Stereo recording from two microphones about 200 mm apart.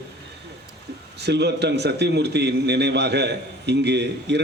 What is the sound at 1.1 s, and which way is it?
A man's voice, 55° right (ahead or behind).